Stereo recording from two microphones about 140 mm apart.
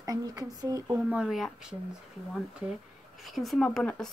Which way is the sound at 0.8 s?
5° right (ahead or behind).